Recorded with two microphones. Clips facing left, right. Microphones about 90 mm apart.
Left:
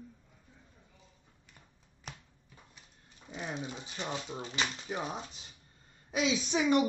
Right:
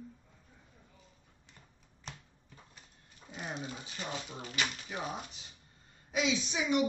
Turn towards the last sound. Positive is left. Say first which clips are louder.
# left 2 dB
turn(degrees=35)  # may be behind; listen again after turning